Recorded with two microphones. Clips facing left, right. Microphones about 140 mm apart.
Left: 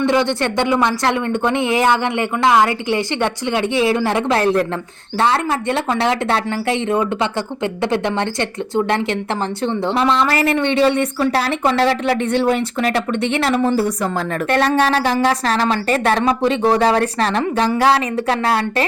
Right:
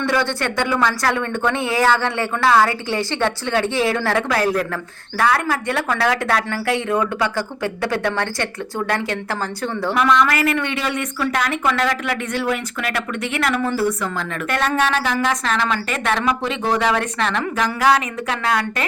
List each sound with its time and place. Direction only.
0.0 s a woman's voice: 20° left (ahead or behind)